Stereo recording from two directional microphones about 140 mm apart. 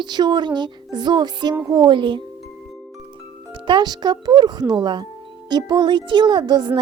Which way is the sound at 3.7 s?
30° right (ahead or behind).